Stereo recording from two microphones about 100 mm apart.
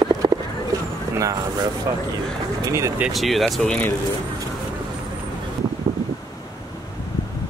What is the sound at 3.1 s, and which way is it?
Speech, centre (ahead or behind).